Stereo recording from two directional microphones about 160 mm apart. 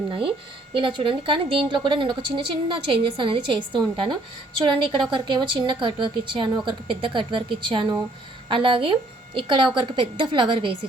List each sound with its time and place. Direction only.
0.1 s speech: 35° right (ahead or behind)